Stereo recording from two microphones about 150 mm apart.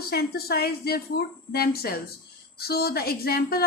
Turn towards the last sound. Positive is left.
turn(degrees=90)